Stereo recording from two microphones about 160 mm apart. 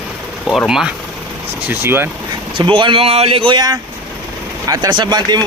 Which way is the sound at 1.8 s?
15° right (ahead or behind).